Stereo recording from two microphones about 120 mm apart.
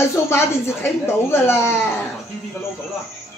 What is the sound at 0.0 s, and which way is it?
Speech, 20° left (ahead or behind).